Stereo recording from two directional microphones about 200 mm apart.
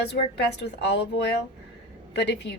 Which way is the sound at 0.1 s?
55° left (ahead or behind).